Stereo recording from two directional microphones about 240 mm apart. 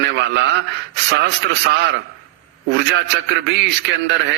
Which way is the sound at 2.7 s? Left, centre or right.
Right.